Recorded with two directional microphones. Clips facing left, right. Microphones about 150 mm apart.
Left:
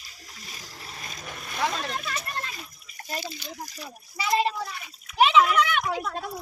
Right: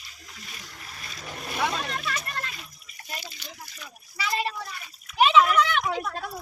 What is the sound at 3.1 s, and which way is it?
Speech, 40° left (ahead or behind).